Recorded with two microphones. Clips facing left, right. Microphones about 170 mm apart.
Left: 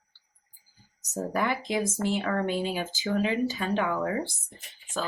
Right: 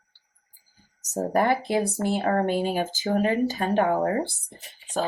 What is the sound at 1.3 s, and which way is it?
Speech, 40° right (ahead or behind).